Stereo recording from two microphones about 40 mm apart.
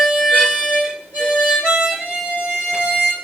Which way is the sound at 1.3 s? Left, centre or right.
Centre.